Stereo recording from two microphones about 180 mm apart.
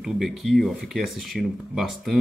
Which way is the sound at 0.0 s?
Centre (ahead or behind).